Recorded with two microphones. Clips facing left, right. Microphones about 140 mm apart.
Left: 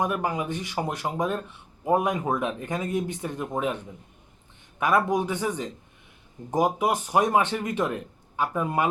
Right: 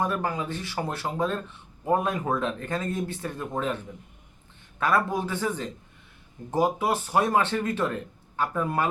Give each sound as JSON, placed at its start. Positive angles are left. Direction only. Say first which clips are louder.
{"t": 0.0, "sound": "speech", "louder": "left 1 dB", "side_deg": 15}
{"t": 4.8, "sound": "speech", "louder": "left 2 dB", "side_deg": 15}